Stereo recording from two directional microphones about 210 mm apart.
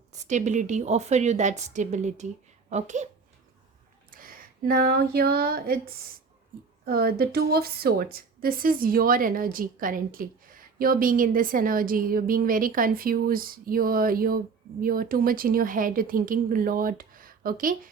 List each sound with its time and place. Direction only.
0.1 s a woman's voice: 35° right (ahead or behind)
4.1 s a sound: 40° right (ahead or behind)
6.8 s a woman's voice: 45° right (ahead or behind)